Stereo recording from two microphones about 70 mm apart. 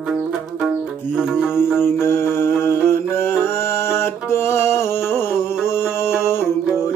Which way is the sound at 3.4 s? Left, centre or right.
Left.